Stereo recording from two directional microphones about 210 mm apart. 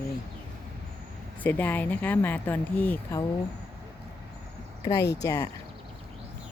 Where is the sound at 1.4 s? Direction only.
10° left (ahead or behind).